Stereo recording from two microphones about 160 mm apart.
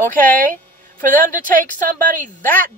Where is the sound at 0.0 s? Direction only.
60° right (ahead or behind).